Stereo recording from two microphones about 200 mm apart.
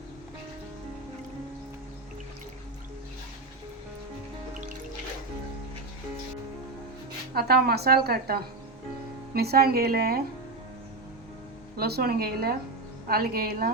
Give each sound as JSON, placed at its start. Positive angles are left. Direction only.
{"t": 7.3, "sound": "a woman's voice", "side_deg": -50}
{"t": 11.8, "sound": "a woman's voice", "side_deg": -50}